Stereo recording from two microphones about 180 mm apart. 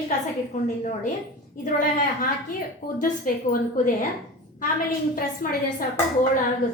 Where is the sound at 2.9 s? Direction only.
50° left (ahead or behind).